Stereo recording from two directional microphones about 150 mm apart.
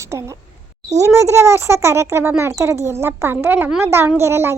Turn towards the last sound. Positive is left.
turn(degrees=-15)  # may be behind; listen again after turning